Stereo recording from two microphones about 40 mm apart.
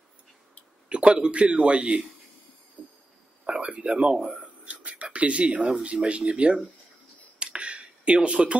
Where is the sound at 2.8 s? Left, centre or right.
Left.